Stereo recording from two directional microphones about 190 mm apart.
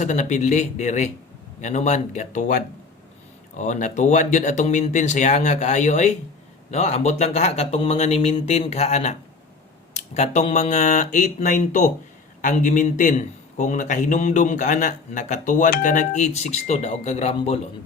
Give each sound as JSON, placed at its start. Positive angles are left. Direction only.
{"t": 0.0, "sound": "a man's voice", "side_deg": 40}
{"t": 3.6, "sound": "a man's voice", "side_deg": 40}